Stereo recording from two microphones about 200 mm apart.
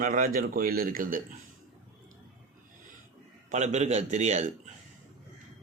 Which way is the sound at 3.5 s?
35° right (ahead or behind).